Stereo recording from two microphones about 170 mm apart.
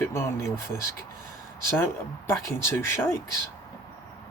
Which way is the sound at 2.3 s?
15° left (ahead or behind).